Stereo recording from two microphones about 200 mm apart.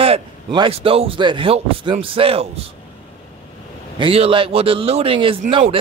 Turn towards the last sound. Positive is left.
turn(degrees=-30)  # may be behind; listen again after turning